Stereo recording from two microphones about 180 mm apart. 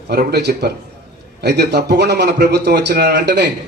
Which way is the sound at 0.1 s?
60° right (ahead or behind).